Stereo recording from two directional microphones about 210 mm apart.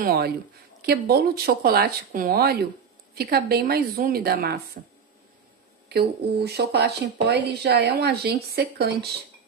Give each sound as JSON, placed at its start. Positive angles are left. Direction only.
{"t": 0.0, "sound": "speech", "side_deg": -45}
{"t": 5.9, "sound": "speech", "side_deg": -50}